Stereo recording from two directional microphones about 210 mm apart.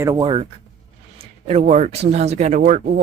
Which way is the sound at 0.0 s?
15° right (ahead or behind).